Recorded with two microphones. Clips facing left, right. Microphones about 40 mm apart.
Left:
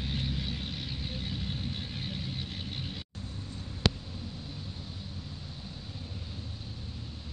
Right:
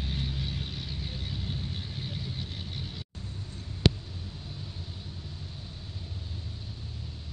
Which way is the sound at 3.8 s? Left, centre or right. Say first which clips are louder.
Right 3 dB; right.